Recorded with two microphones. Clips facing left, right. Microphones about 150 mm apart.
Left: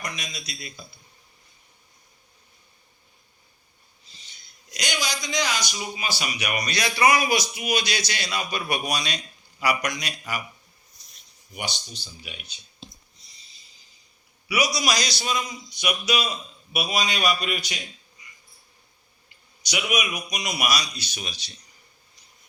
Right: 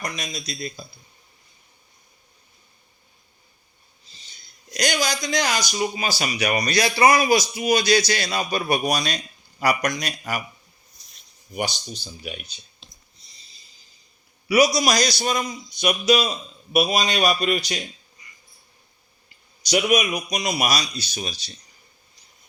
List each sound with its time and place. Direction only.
0.0 s a man's voice: 40° right (ahead or behind)
4.7 s speech: 45° right (ahead or behind)
6.0 s a man's voice: 40° right (ahead or behind)
11.5 s speech: 45° right (ahead or behind)
14.4 s a man's voice: 40° right (ahead or behind)
19.7 s a man's voice: 40° right (ahead or behind)